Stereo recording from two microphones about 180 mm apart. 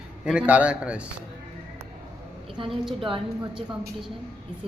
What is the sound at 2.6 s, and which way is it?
Speech, 25° right (ahead or behind).